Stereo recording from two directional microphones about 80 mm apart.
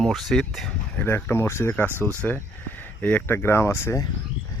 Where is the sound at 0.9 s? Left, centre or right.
Left.